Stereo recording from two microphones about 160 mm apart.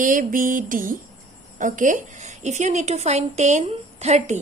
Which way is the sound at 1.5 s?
55° right (ahead or behind).